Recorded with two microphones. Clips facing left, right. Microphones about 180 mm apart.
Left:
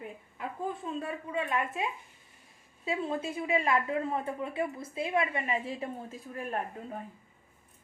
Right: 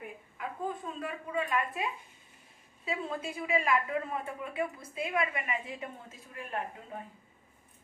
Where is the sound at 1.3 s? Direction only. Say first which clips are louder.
Even; 25° left (ahead or behind).